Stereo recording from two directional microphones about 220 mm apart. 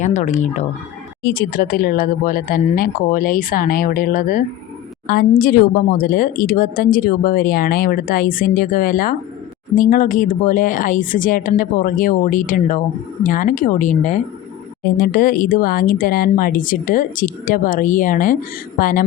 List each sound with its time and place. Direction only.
0.0 s speech: 35° left (ahead or behind)